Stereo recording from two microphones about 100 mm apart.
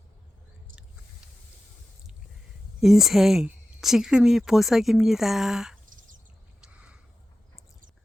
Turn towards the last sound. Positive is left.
turn(degrees=-10)  # may be behind; listen again after turning